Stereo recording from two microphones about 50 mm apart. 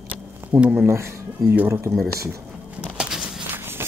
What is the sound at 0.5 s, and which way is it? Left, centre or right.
Speech, right.